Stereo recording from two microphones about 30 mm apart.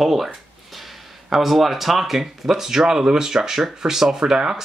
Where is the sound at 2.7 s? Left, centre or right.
Centre.